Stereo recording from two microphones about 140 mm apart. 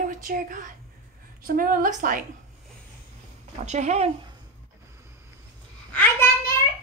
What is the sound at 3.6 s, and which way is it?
Speech, 55° right (ahead or behind).